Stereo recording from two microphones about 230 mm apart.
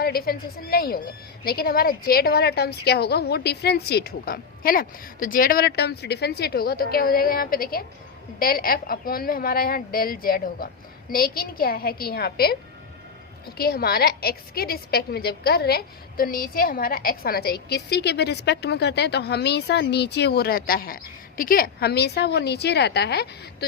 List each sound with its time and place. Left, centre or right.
0.0 s a woman's voice: left
13.6 s a woman's voice: left